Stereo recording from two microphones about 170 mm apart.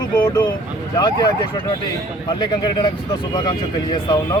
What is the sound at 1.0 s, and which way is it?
Speech, 25° left (ahead or behind).